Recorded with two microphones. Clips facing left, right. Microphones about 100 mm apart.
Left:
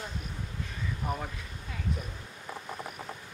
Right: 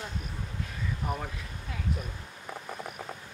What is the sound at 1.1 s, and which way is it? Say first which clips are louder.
Speech: even; 5° right (ahead or behind).